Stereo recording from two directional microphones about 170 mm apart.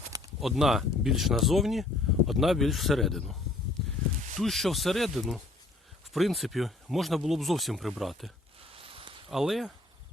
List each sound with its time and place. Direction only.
0.3 s speech: centre (ahead or behind)
4.4 s speech: centre (ahead or behind)
8.7 s a sound: 35° right (ahead or behind)
9.3 s speech: centre (ahead or behind)